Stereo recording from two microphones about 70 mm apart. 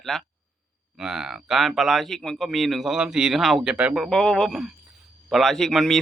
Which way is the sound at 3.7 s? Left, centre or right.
Centre.